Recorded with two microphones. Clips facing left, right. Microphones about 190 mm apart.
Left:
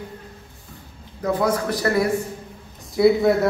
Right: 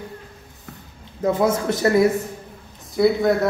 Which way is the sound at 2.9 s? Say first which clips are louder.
Left 1 dB; centre (ahead or behind).